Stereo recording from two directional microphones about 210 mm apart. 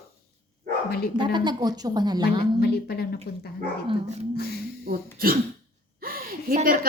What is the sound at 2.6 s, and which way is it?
Speech, 50° left (ahead or behind).